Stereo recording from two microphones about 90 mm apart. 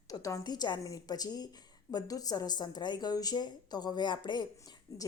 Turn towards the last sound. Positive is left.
turn(degrees=45)  # may be behind; listen again after turning